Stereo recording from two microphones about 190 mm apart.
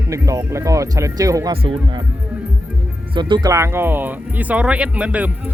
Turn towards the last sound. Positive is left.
turn(degrees=-5)  # may be behind; listen again after turning